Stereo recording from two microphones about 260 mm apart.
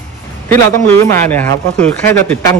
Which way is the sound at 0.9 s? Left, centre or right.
Centre.